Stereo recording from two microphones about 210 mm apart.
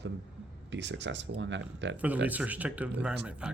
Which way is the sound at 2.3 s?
10° right (ahead or behind).